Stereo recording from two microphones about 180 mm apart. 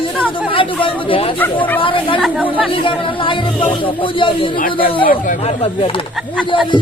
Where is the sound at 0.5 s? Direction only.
30° left (ahead or behind).